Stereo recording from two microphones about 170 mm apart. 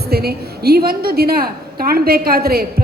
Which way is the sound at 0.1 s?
65° right (ahead or behind).